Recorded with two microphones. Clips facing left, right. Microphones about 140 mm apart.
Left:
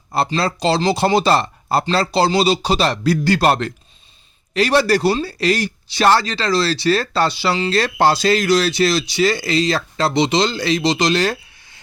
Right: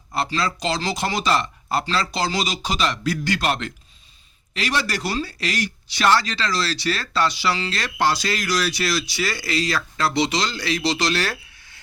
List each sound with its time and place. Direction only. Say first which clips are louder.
0.3 s a man's voice: left 6 dB; 30° left (ahead or behind)